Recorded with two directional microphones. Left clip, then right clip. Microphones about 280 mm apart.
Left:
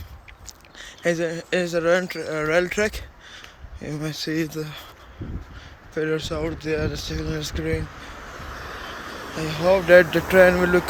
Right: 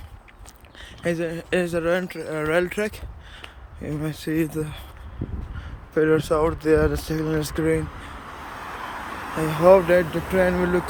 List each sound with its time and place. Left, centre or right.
0.8 s speech: centre
5.9 s speech: centre
8.9 s a sound: centre
9.9 s speech: centre